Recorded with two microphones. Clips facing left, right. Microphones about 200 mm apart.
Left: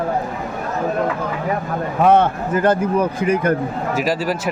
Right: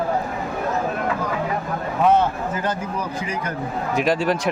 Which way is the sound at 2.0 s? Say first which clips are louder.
Left 3 dB; 60° left (ahead or behind).